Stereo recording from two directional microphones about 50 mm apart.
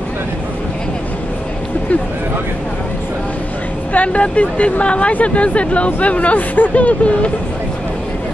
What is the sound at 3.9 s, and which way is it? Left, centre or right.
Speech, left.